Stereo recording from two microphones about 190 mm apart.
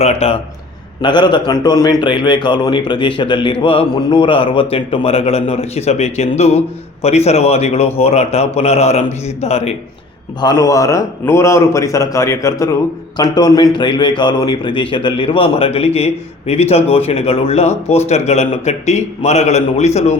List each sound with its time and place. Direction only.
0.0 s a man's voice: 35° left (ahead or behind)
10.4 s a man's voice: 20° left (ahead or behind); by 20.1 s 35° left (ahead or behind)